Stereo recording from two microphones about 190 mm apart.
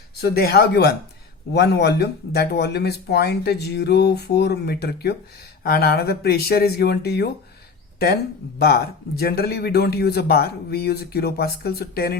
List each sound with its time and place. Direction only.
0.2 s speech: 55° left (ahead or behind)